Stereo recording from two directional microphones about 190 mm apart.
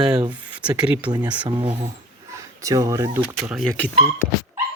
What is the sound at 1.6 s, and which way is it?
Speech, 30° right (ahead or behind).